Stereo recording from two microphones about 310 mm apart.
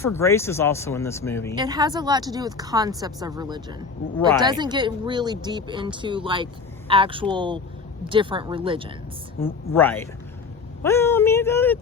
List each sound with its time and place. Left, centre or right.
0.0 s speech: centre
1.5 s speech: centre
9.4 s speech: centre